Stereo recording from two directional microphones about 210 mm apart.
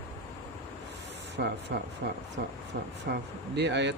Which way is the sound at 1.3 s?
55° right (ahead or behind).